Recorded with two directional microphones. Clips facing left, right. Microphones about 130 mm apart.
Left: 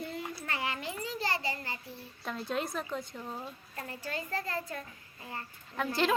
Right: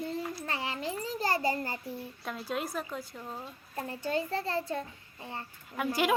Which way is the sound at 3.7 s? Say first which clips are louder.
Right 7 dB; 30° right (ahead or behind).